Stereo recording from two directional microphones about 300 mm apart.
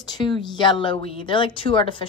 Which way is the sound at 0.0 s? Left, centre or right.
Centre.